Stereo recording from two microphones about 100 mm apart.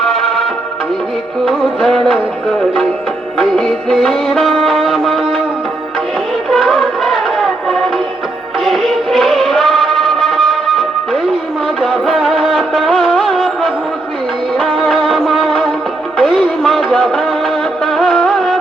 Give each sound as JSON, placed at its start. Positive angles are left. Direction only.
{"t": 0.0, "sound": "music", "side_deg": 5}
{"t": 1.5, "sound": "music", "side_deg": 0}
{"t": 6.5, "sound": "music", "side_deg": 0}
{"t": 17.8, "sound": "music of bollywood", "side_deg": 0}